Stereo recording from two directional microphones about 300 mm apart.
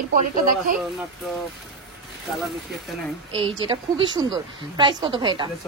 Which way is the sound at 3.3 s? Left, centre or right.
Centre.